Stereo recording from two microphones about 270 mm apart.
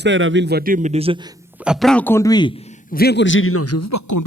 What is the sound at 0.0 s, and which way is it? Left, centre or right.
A man's voice, right.